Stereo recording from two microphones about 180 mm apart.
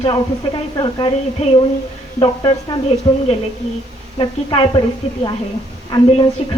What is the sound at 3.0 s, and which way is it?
A woman's voice, 20° left (ahead or behind).